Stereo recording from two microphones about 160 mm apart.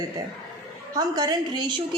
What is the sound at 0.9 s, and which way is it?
Speech, 25° right (ahead or behind).